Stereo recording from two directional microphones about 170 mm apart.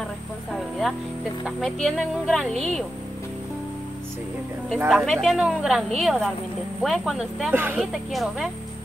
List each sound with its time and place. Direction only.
0.5 s music: centre (ahead or behind)
1.4 s a woman's voice: centre (ahead or behind)
4.8 s a woman's voice: centre (ahead or behind)
7.5 s a woman's voice: 10° right (ahead or behind)